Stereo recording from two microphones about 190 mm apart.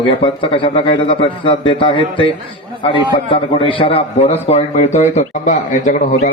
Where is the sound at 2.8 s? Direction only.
30° left (ahead or behind).